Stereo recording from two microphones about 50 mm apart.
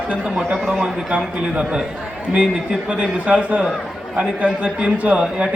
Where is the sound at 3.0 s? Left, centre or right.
Right.